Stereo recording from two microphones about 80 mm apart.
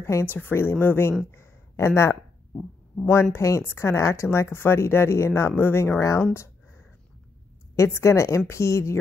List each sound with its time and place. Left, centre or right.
0.0 s speech: left
0.3 s speech: left
1.3 s a sound: left
3.1 s speech: left
7.7 s speech: left